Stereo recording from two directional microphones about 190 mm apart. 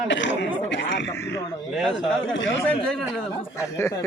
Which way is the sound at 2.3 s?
75° left (ahead or behind).